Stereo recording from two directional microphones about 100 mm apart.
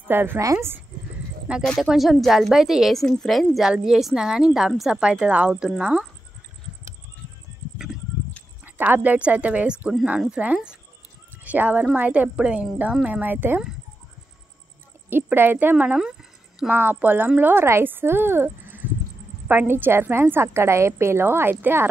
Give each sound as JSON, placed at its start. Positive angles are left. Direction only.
{"t": 0.1, "sound": "a woman's voice", "side_deg": -20}
{"t": 1.6, "sound": "a woman's voice", "side_deg": 5}
{"t": 8.6, "sound": "a woman's voice", "side_deg": -20}
{"t": 15.0, "sound": "a woman's voice", "side_deg": -20}
{"t": 16.0, "sound": "a sound", "side_deg": -5}
{"t": 16.7, "sound": "a woman's voice", "side_deg": -20}